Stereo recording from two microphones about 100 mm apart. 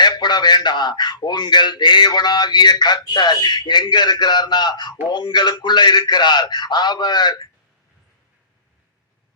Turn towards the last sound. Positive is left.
turn(degrees=45)  # may be behind; listen again after turning